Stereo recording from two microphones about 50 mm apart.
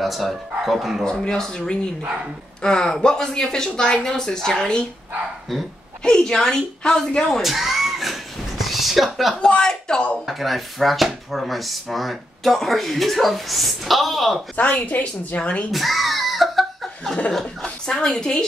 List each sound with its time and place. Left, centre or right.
0.0 s speech: centre
1.0 s speech: centre
6.0 s speech: centre
7.4 s a sound: centre
9.5 s speech: centre
10.2 s speech: centre
14.6 s a woman's voice: left
15.7 s laughter: centre
17.3 s a woman's voice: centre